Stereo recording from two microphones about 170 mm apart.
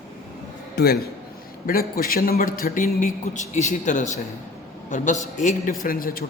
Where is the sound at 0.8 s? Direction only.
65° left (ahead or behind).